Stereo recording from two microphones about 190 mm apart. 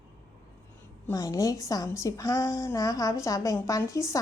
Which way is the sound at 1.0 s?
15° left (ahead or behind).